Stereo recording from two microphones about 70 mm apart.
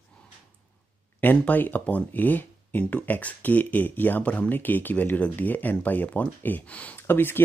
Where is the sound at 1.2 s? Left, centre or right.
Left.